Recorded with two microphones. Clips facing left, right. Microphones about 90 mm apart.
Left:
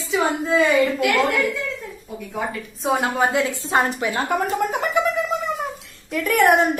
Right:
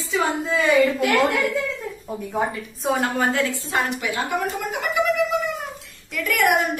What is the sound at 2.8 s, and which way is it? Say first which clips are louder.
Speech: left 1 dB; centre (ahead or behind).